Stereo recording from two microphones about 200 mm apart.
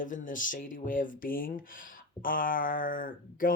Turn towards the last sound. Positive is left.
turn(degrees=45)  # may be behind; listen again after turning